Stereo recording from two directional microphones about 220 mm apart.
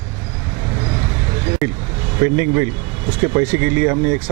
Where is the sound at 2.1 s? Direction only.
15° right (ahead or behind).